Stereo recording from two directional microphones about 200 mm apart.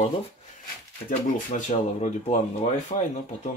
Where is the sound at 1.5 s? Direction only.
35° left (ahead or behind).